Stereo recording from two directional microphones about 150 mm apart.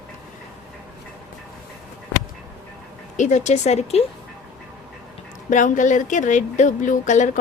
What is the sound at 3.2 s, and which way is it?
Speech, 55° left (ahead or behind).